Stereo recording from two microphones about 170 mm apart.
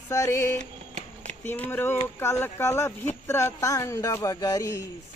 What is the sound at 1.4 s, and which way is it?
Speech, 10° left (ahead or behind).